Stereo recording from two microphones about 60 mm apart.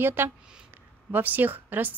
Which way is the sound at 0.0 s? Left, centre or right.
Right.